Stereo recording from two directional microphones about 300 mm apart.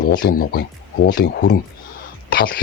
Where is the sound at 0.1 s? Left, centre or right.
Left.